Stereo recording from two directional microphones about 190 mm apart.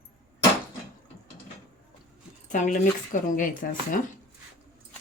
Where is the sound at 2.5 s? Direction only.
40° left (ahead or behind).